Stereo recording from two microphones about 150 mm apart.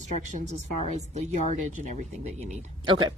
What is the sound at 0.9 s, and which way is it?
Speech, 50° right (ahead or behind).